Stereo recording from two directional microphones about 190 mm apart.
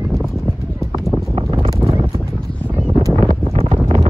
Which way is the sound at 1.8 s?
10° right (ahead or behind).